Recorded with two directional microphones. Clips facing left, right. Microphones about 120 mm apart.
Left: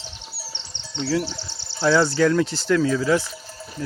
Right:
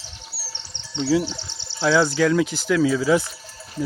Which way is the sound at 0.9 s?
15° right (ahead or behind).